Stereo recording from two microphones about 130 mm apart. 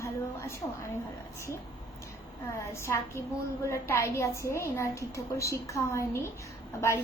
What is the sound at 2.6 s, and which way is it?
A woman's voice, 20° left (ahead or behind).